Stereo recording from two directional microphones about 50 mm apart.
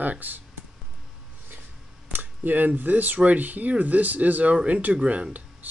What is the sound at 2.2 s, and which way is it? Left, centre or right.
Speech, right.